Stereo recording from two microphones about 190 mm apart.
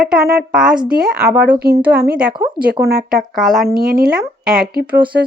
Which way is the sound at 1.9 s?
55° right (ahead or behind).